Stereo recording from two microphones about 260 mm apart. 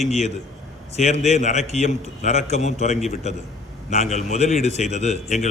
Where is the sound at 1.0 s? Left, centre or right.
Left.